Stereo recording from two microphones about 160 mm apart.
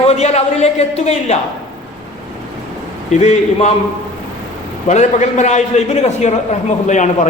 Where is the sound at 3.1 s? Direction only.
45° left (ahead or behind).